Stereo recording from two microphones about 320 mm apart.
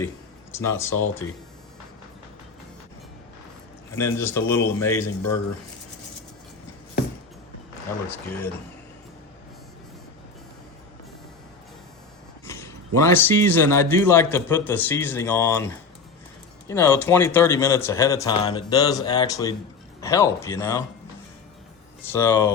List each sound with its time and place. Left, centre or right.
0.5 s speech: centre
3.9 s speech: centre
5.0 s speech: left
12.5 s speech: centre
22.1 s speech: centre